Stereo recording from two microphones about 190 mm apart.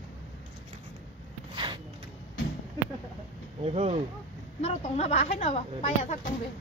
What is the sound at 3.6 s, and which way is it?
Speech, 35° right (ahead or behind).